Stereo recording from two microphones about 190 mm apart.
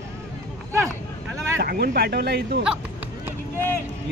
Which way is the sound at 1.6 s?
55° right (ahead or behind).